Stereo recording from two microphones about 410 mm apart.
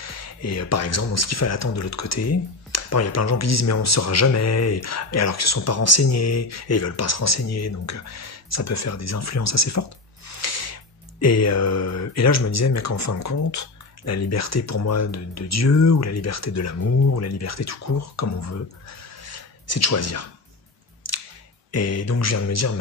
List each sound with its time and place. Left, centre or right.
0.0 s speech: left
21.0 s a sound: left
21.7 s speech: left